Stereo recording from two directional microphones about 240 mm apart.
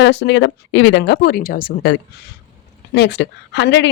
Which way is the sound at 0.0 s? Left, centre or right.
Left.